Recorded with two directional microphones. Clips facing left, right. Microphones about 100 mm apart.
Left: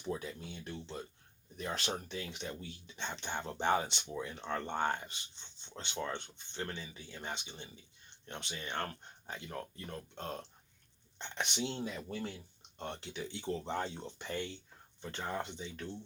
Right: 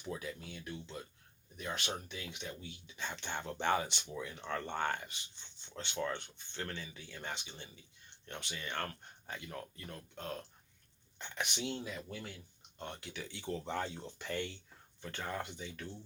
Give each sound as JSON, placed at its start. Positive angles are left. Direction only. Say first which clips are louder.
{"t": 0.1, "sound": "speech", "louder": "left 3 dB", "side_deg": 30}
{"t": 3.0, "sound": "speech", "louder": "left 1 dB", "side_deg": 20}
{"t": 13.1, "sound": "speech", "louder": "left 2 dB", "side_deg": 20}